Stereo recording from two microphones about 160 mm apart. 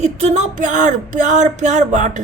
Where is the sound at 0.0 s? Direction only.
45° right (ahead or behind).